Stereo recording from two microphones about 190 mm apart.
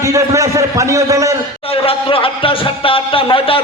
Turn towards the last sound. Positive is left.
turn(degrees=30)  # may be behind; listen again after turning